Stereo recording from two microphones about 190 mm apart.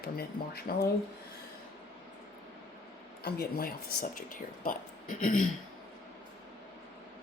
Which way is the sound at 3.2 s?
55° left (ahead or behind).